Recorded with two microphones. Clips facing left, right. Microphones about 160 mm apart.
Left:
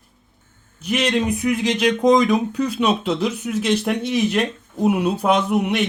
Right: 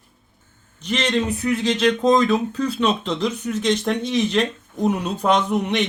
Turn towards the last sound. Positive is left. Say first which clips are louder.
# left 2 dB
turn(degrees=5)  # may be behind; listen again after turning